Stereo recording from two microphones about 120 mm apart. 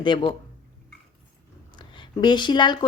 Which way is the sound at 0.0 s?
40° left (ahead or behind).